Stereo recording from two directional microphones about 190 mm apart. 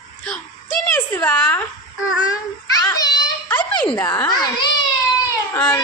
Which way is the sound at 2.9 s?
20° left (ahead or behind).